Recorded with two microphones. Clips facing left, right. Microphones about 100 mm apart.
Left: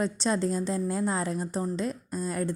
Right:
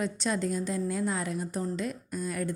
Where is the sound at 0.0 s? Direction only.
30° left (ahead or behind).